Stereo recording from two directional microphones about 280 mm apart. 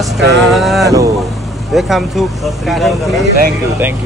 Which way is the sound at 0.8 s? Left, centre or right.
Centre.